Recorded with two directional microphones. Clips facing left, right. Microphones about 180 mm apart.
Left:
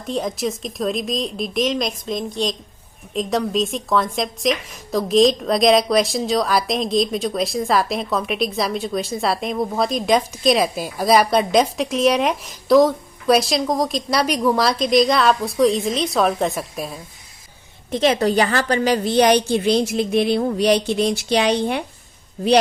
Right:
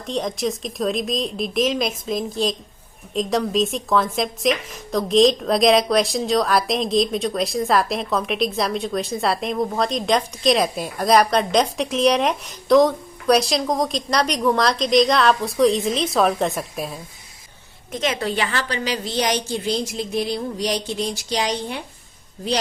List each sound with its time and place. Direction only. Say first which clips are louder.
0.1 s speech: left 1 dB; 5° left (ahead or behind)
17.9 s a woman's voice: left 7 dB; 35° left (ahead or behind); by 21.8 s 65° left (ahead or behind)